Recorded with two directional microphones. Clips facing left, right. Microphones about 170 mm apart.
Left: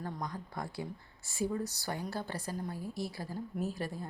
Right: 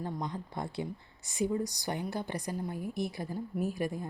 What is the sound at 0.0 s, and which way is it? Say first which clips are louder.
A woman's voice: right 3 dB; 20° right (ahead or behind).